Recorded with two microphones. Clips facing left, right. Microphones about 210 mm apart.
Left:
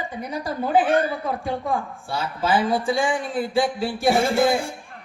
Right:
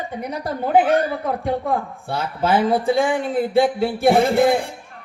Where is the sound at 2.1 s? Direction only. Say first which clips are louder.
Right 3 dB; 60° right (ahead or behind).